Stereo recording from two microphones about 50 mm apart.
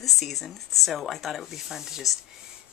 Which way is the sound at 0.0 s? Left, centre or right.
Centre.